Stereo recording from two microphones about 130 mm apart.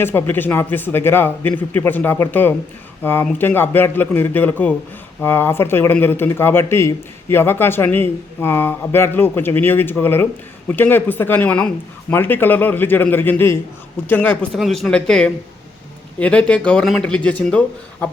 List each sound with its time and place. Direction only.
0.0 s a man's voice: 15° left (ahead or behind)